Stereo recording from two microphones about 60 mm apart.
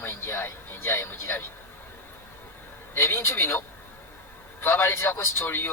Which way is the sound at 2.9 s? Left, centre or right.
Left.